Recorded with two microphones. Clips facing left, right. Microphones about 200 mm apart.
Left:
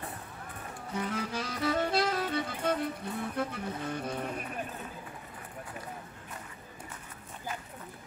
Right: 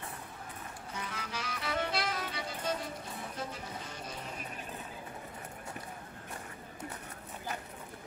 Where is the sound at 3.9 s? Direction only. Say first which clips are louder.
Left 8 dB; 55° left (ahead or behind).